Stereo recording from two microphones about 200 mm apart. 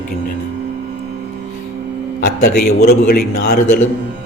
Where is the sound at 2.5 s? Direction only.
50° left (ahead or behind).